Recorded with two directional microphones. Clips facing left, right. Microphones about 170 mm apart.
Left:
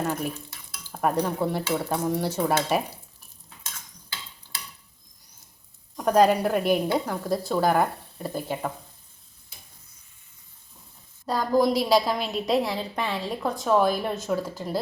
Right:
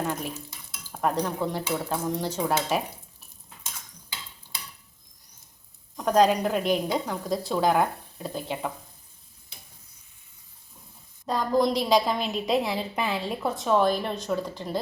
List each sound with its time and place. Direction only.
0.0 s speech: 5° left (ahead or behind)
0.3 s stir: 5° right (ahead or behind)
0.9 s speech: 10° left (ahead or behind)
6.0 s a woman's voice: 5° left (ahead or behind)
11.3 s a woman's voice: 5° left (ahead or behind)